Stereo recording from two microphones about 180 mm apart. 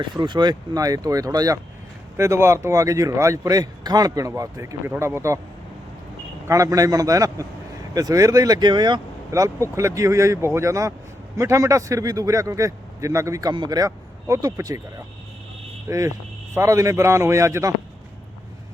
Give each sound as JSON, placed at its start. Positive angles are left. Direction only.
{"t": 0.0, "sound": "a man's voice", "side_deg": -25}
{"t": 6.5, "sound": "a man's voice", "side_deg": -20}
{"t": 15.9, "sound": "a man's voice", "side_deg": -15}